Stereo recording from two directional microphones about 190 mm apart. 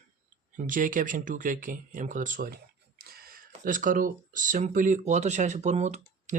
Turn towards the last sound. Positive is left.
turn(degrees=-35)  # may be behind; listen again after turning